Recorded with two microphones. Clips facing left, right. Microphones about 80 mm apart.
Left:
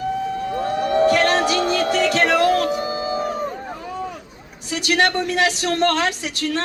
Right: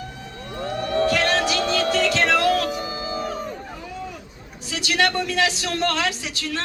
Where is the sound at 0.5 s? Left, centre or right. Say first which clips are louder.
Left 3 dB; centre.